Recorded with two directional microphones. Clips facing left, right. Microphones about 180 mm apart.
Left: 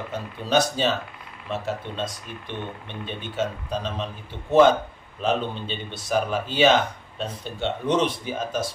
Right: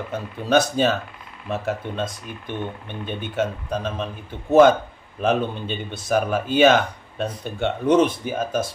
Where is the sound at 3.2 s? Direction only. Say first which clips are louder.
Right 3 dB; 55° right (ahead or behind).